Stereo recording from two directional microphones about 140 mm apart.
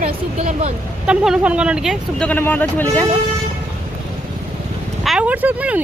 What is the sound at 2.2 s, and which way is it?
Speech, 15° left (ahead or behind).